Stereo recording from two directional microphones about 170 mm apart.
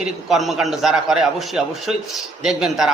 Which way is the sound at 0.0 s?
Centre (ahead or behind).